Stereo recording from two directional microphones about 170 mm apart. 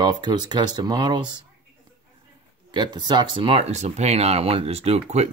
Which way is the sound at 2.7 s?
25° right (ahead or behind).